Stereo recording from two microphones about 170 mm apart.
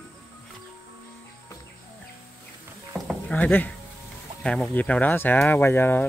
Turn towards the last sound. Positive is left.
turn(degrees=10)  # may be behind; listen again after turning